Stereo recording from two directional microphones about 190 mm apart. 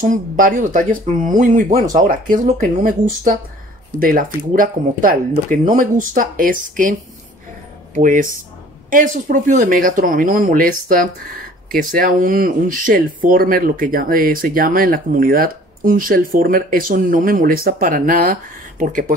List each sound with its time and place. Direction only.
0.0 s speech: 45° right (ahead or behind)